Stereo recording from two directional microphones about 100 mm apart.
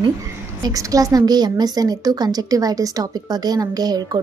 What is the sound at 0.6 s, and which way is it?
A woman's voice, 35° right (ahead or behind).